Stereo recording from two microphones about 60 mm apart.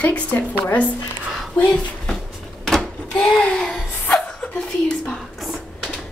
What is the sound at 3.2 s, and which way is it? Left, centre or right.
Speech, centre.